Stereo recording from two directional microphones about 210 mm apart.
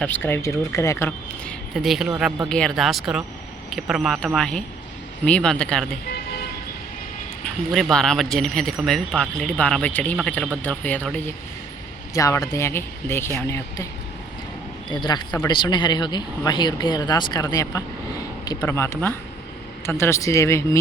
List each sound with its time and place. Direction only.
0.0 s speech: 10° left (ahead or behind)
1.7 s speech: centre (ahead or behind)
6.1 s vehicle: 50° left (ahead or behind)
7.4 s speech: centre (ahead or behind)
14.8 s speech: 20° left (ahead or behind)